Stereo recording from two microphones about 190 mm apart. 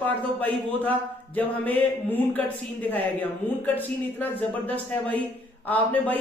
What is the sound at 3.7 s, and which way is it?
A man's voice, 10° left (ahead or behind).